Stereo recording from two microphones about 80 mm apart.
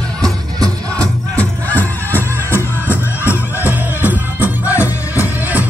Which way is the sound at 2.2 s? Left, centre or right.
Right.